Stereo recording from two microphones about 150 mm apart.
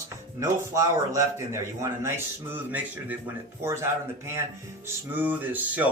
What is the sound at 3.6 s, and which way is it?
Speech, 15° right (ahead or behind).